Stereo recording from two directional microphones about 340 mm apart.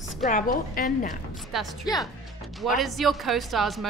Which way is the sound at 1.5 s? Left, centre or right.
Centre.